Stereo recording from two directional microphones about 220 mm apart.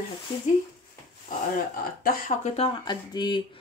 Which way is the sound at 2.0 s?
35° left (ahead or behind).